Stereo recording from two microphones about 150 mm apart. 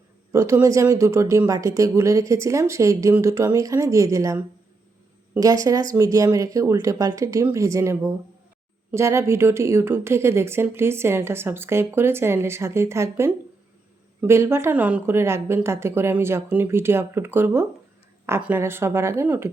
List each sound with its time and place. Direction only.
0.3 s speech: 20° right (ahead or behind)
5.4 s a woman's voice: 25° right (ahead or behind)